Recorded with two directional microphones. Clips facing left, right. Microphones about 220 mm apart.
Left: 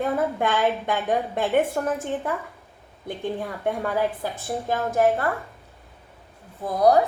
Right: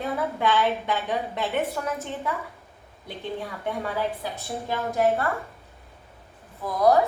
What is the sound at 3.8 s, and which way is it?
A woman's voice, 50° left (ahead or behind).